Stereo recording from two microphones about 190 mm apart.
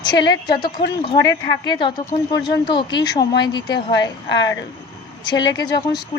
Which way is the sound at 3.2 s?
60° left (ahead or behind).